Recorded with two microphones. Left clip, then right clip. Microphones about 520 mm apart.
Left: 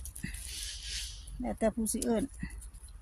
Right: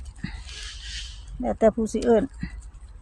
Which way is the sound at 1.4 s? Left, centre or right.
Left.